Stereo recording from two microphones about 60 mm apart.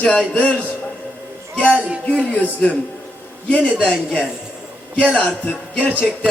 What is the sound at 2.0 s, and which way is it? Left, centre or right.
Speech, left.